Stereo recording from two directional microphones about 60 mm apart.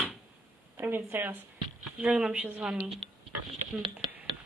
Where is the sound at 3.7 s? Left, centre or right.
Right.